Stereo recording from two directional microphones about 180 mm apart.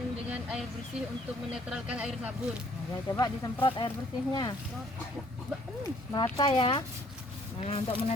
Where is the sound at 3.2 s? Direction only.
20° left (ahead or behind).